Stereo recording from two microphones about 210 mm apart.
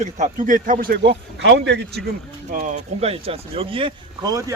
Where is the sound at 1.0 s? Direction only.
55° right (ahead or behind).